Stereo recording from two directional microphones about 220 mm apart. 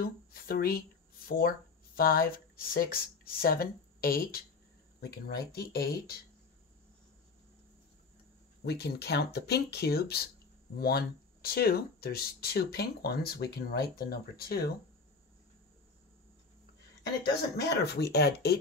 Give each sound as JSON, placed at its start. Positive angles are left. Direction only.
{"t": 0.0, "sound": "speech", "side_deg": 40}
{"t": 8.6, "sound": "speech", "side_deg": 50}
{"t": 17.0, "sound": "speech", "side_deg": 45}